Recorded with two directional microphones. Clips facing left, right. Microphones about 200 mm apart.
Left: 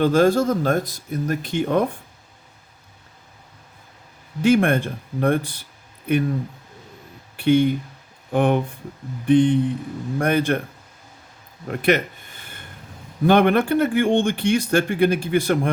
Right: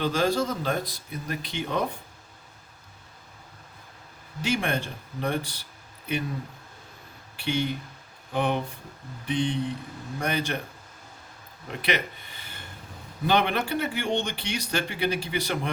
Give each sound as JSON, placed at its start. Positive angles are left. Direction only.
{"t": 0.0, "sound": "speech", "side_deg": 50}
{"t": 4.4, "sound": "speech", "side_deg": 55}
{"t": 7.3, "sound": "speech", "side_deg": 55}
{"t": 11.7, "sound": "speech", "side_deg": 50}